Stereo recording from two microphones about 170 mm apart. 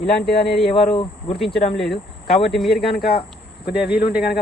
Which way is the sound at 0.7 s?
35° left (ahead or behind).